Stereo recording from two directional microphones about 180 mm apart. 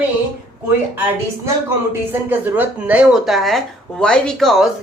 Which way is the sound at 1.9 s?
10° right (ahead or behind).